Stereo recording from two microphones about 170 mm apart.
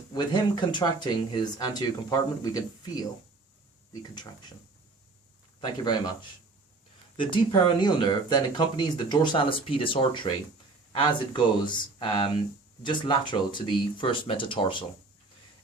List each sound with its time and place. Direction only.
0.1 s speech: 25° left (ahead or behind)
5.5 s speech: 25° left (ahead or behind)
7.2 s speech: 30° left (ahead or behind)